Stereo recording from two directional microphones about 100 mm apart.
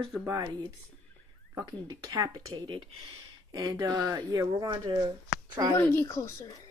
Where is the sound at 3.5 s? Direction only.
35° right (ahead or behind).